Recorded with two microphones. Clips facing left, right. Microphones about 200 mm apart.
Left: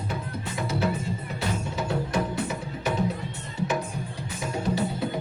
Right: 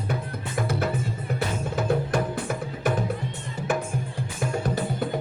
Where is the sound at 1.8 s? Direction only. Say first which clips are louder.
Right 3 dB; 55° right (ahead or behind).